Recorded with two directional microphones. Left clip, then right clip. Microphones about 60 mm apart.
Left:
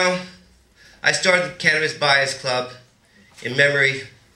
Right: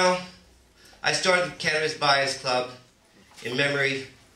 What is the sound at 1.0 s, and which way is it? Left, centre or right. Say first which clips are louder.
Speech: left 5 dB; left.